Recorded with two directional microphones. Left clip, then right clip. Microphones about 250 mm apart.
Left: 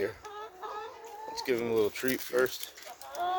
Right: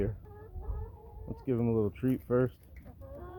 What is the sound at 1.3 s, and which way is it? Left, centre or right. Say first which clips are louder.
Speech: left 3 dB; centre.